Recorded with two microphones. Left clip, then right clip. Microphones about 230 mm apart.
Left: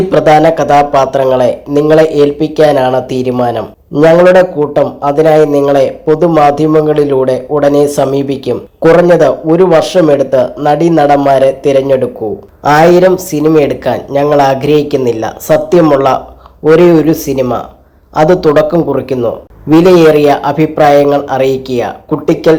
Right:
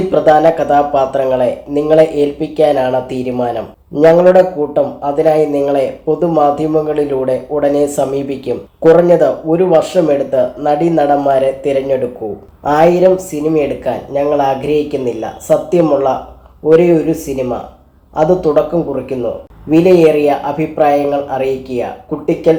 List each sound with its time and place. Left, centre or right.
0.1 s speech: left